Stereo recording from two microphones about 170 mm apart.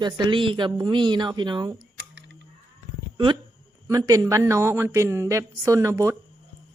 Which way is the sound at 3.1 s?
30° right (ahead or behind).